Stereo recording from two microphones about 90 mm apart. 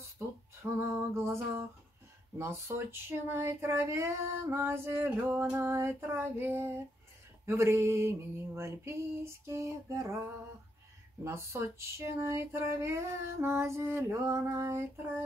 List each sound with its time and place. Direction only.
0.2 s speech: 25° right (ahead or behind)
7.4 s a sound: 30° right (ahead or behind)
11.2 s speech: 30° right (ahead or behind)